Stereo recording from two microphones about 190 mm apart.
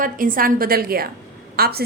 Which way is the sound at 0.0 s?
45° right (ahead or behind).